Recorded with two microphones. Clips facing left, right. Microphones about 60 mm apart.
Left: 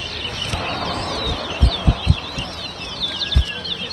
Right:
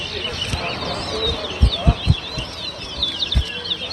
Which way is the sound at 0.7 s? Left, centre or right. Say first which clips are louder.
Left 1 dB; left.